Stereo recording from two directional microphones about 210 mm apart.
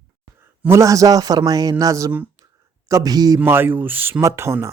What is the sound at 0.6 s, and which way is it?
Speech, 15° right (ahead or behind).